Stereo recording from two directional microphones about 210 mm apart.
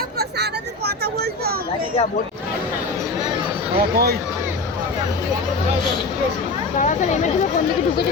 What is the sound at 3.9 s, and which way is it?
Speech, 50° right (ahead or behind).